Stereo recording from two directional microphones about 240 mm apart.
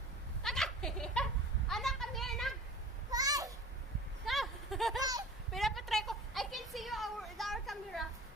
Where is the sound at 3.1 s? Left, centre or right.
Centre.